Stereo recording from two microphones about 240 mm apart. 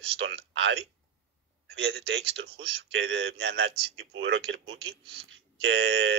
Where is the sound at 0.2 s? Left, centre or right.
Right.